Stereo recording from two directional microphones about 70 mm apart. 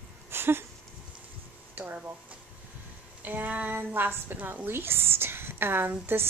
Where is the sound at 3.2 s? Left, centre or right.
Right.